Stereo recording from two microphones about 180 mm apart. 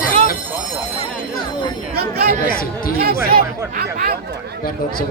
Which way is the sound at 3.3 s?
50° right (ahead or behind).